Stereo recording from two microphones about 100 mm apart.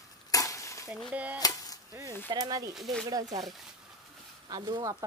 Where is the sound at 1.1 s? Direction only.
15° right (ahead or behind).